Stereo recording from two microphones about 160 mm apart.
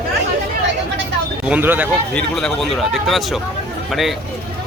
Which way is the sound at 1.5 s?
10° right (ahead or behind).